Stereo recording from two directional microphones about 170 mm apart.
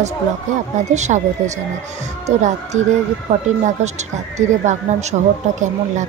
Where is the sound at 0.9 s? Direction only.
45° right (ahead or behind).